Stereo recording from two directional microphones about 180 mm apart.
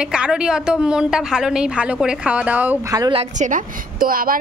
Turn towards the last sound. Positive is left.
turn(degrees=-50)  # may be behind; listen again after turning